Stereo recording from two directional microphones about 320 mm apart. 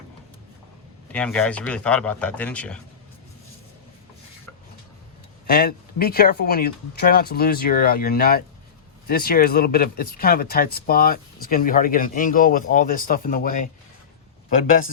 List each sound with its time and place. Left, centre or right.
1.1 s speech: centre
5.5 s speech: left